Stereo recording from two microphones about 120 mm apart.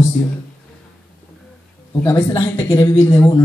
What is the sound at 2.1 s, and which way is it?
Speech, 45° left (ahead or behind).